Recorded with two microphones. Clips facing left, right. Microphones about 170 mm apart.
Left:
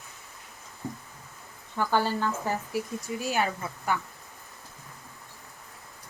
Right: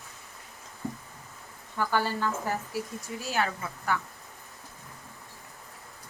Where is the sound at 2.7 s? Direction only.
15° left (ahead or behind).